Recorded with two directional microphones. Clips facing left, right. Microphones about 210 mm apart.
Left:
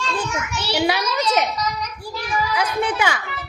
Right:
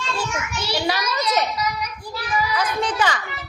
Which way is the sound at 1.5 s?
10° right (ahead or behind).